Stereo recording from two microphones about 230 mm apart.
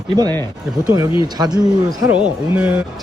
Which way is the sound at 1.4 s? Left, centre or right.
Centre.